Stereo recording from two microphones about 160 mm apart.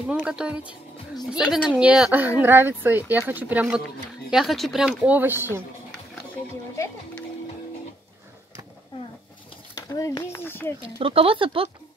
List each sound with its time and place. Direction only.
0.2 s speech: 5° right (ahead or behind)
9.8 s speech: 20° left (ahead or behind)
11.0 s speech: 35° right (ahead or behind)